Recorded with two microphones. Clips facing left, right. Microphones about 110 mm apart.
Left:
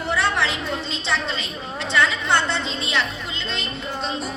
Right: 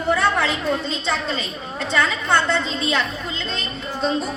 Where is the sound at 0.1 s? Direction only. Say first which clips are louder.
Right 3 dB; 45° right (ahead or behind).